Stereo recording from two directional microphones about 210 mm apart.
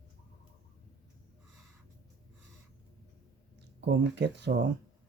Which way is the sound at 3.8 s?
55° right (ahead or behind).